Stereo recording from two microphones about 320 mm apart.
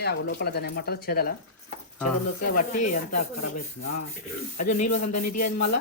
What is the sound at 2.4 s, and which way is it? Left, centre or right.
Speech, left.